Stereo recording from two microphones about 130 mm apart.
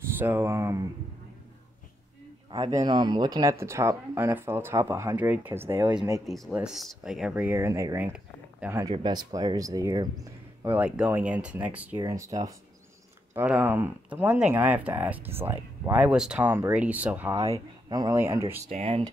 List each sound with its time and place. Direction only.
0.2 s speech: 15° right (ahead or behind)
2.5 s speech: 30° right (ahead or behind)
3.5 s speech: 20° right (ahead or behind)
6.2 s speech: centre (ahead or behind); by 8.1 s 25° right (ahead or behind)
8.1 s a sound: 10° right (ahead or behind)
8.9 s speech: 35° right (ahead or behind)
10.7 s speech: 10° right (ahead or behind)
12.0 s speech: 25° right (ahead or behind)
13.3 s speech: 15° right (ahead or behind)
17.4 s speech: 50° right (ahead or behind)
18.1 s speech: 20° right (ahead or behind)
18.7 s speech: 55° right (ahead or behind)